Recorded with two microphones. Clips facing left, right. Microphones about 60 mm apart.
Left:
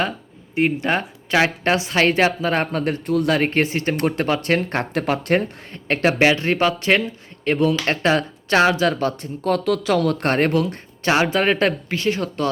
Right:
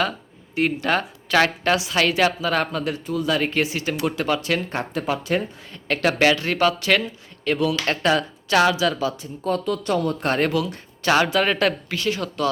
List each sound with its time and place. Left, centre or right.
0.5 s speech: left
1.7 s speech: left
3.1 s speech: left
10.2 s speech: left
11.1 s speech: left